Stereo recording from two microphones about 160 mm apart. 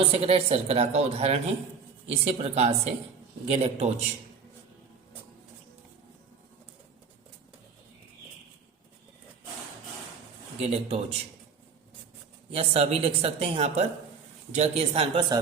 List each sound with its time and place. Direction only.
0.0 s a woman's voice: 40° right (ahead or behind)
10.6 s a woman's voice: 40° right (ahead or behind)
12.5 s a woman's voice: 40° right (ahead or behind)